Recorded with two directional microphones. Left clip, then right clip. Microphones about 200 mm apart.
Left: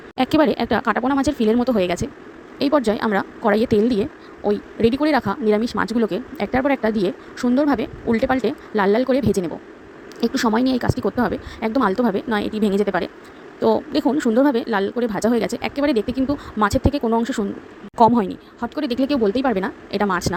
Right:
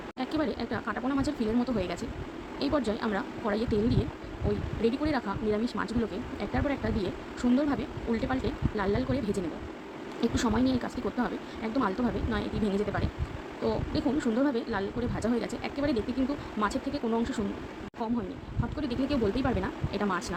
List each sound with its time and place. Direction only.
0.2 s speech: 45° left (ahead or behind)